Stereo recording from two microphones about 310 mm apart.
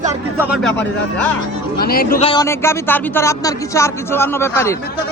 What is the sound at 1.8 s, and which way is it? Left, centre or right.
Speech, left.